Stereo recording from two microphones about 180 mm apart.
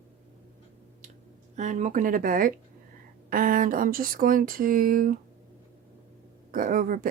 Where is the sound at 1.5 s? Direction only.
40° right (ahead or behind).